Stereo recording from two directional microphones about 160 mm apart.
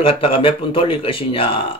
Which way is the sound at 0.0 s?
35° left (ahead or behind).